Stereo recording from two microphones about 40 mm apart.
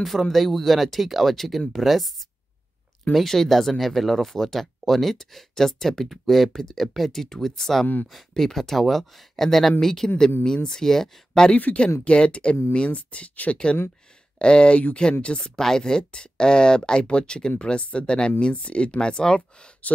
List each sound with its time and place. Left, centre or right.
0.0 s speech: centre
11.7 s speech: left
15.3 s speech: centre